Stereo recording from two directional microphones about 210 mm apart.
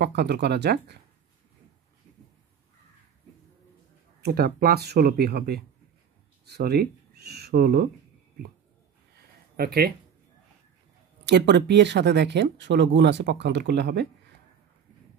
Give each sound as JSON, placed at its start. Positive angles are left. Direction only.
{"t": 0.0, "sound": "speech", "side_deg": -55}
{"t": 4.2, "sound": "speech", "side_deg": -45}
{"t": 9.6, "sound": "speech", "side_deg": -50}
{"t": 11.2, "sound": "speech", "side_deg": -55}